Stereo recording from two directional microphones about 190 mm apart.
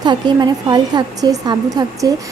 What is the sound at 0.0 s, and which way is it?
A woman's voice, 20° right (ahead or behind).